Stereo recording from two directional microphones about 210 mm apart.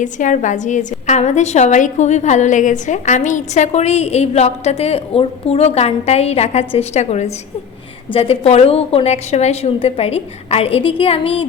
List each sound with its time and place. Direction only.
0.0 s a woman's voice: 35° left (ahead or behind)